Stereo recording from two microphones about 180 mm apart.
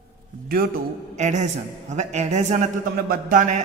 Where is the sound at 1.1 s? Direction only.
40° right (ahead or behind).